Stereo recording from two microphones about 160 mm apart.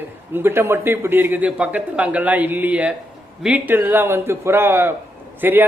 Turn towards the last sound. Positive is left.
turn(degrees=-15)  # may be behind; listen again after turning